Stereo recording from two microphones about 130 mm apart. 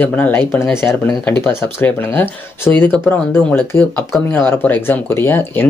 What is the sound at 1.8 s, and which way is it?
Speech, 15° left (ahead or behind).